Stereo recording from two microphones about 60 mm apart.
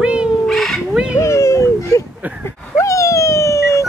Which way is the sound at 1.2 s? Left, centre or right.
Left.